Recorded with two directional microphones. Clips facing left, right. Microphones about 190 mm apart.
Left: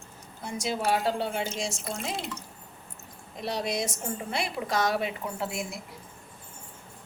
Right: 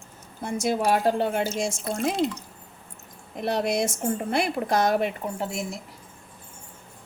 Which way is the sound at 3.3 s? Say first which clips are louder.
Right 6 dB; 55° right (ahead or behind).